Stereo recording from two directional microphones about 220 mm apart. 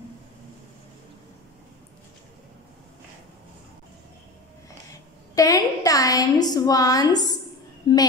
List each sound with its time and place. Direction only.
5.3 s a woman's voice: 15° left (ahead or behind)